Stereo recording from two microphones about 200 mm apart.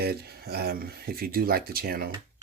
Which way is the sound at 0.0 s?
50° right (ahead or behind).